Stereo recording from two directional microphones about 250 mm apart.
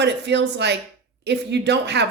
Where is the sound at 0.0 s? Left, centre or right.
Right.